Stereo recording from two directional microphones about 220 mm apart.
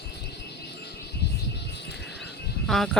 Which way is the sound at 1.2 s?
50° left (ahead or behind).